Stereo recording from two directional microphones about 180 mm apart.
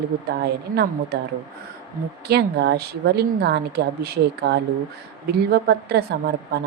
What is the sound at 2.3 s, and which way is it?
A woman's voice, 65° right (ahead or behind).